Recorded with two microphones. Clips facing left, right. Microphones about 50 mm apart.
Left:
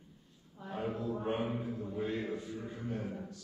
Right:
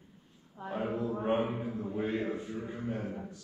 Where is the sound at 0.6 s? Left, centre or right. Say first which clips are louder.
Right 5 dB; right.